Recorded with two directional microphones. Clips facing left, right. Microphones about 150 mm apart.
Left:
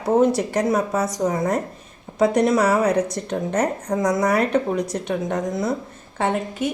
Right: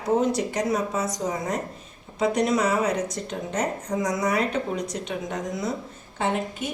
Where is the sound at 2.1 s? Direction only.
55° left (ahead or behind).